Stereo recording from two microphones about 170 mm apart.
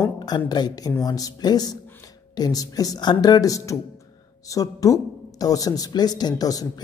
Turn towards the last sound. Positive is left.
turn(degrees=20)  # may be behind; listen again after turning